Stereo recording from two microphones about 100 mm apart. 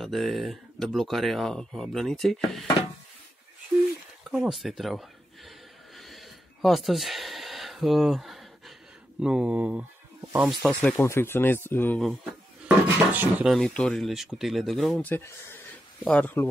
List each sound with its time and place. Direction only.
0.0 s speech: centre (ahead or behind)
4.3 s speech: 5° right (ahead or behind)
5.9 s a sound: centre (ahead or behind)
9.2 s speech: 10° right (ahead or behind)
10.4 s speech: centre (ahead or behind)
10.8 s speech: 20° left (ahead or behind)
12.0 s speech: centre (ahead or behind)
12.6 s speech: 15° right (ahead or behind)
13.6 s speech: 10° left (ahead or behind)
15.0 s speech: 20° left (ahead or behind)
16.0 s speech: 10° left (ahead or behind)